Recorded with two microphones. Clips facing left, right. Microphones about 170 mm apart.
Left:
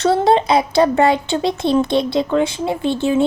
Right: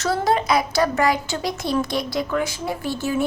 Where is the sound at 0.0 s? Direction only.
25° left (ahead or behind).